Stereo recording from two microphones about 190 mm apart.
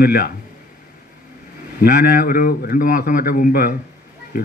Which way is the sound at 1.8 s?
45° left (ahead or behind).